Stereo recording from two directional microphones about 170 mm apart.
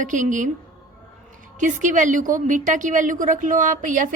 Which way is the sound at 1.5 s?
45° right (ahead or behind).